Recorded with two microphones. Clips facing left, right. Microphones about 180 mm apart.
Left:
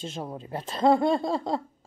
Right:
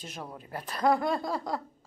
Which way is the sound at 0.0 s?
25° left (ahead or behind).